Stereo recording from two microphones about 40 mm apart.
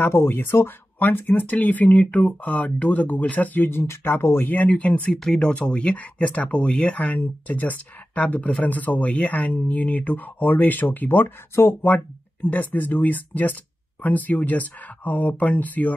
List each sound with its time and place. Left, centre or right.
0.0 s speech: left
0.9 s speech: left
3.7 s speech: left
4.5 s speech: left
5.2 s speech: centre
5.5 s speech: left
12.4 s speech: left